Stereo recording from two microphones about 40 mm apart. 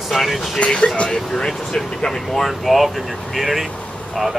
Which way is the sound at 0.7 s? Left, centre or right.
Centre.